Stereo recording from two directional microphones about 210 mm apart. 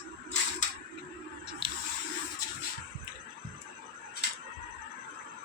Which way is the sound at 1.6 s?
25° right (ahead or behind).